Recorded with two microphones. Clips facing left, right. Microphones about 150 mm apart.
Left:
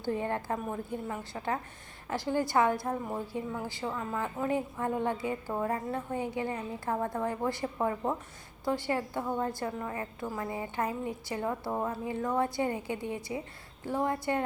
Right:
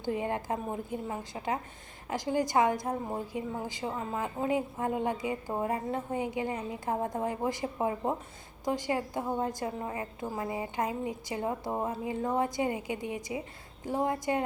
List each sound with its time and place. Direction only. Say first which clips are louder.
0.0 s a woman's voice: even; 15° right (ahead or behind)